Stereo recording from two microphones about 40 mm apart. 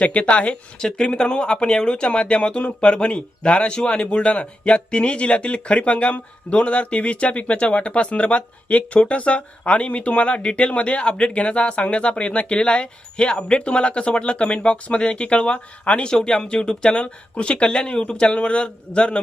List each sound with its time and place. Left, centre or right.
0.0 s speech: left
0.8 s speech: left
16.0 s speech: left